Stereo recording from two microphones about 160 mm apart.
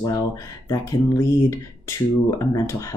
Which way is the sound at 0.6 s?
15° left (ahead or behind).